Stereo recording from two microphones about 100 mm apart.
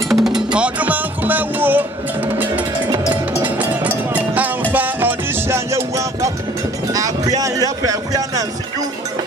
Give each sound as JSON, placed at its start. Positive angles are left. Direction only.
{"t": 0.1, "sound": "music", "side_deg": -5}